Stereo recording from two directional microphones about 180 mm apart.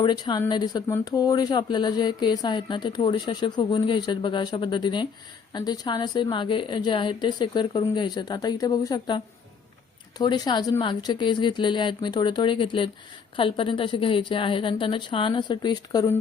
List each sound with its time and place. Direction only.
0.0 s speech: 25° left (ahead or behind)